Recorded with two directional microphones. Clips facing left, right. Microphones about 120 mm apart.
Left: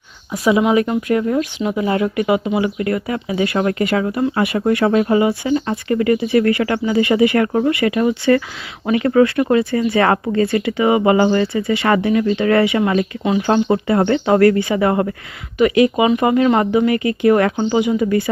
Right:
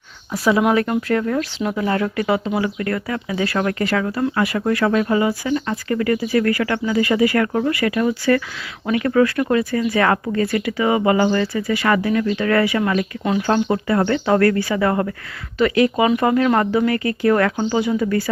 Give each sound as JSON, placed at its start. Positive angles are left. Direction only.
{"t": 0.3, "sound": "speech", "side_deg": 0}